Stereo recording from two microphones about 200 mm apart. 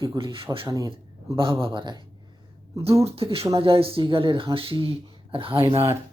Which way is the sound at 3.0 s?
30° right (ahead or behind).